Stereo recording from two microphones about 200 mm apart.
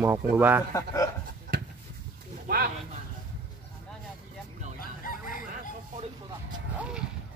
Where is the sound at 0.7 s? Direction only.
15° left (ahead or behind).